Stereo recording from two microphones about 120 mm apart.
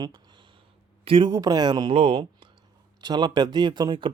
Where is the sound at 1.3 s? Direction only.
30° right (ahead or behind).